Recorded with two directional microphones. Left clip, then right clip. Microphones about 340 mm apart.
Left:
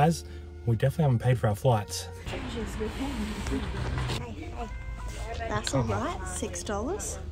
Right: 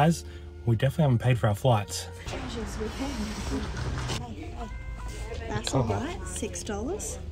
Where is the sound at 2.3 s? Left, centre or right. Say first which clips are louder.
Left 1 dB; right.